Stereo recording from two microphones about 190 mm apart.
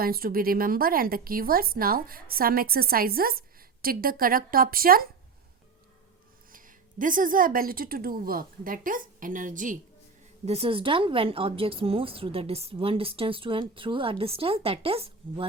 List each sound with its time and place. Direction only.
0.0 s speech: 50° right (ahead or behind)
6.5 s speech: 45° right (ahead or behind)
10.4 s speech: 30° right (ahead or behind)